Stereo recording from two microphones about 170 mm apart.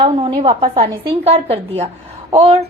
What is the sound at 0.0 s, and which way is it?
A woman's voice, 30° right (ahead or behind).